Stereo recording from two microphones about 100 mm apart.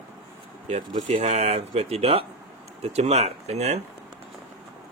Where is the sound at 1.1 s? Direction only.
90° right.